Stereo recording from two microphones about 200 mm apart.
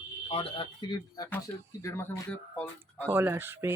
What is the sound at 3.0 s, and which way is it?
Speech, 10° right (ahead or behind).